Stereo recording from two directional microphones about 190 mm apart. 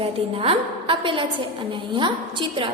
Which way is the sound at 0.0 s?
30° right (ahead or behind).